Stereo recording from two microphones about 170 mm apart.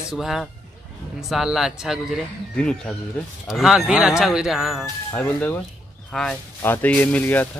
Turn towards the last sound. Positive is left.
turn(degrees=10)  # may be behind; listen again after turning